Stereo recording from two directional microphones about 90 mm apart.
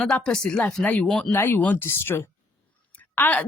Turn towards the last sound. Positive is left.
turn(degrees=20)  # may be behind; listen again after turning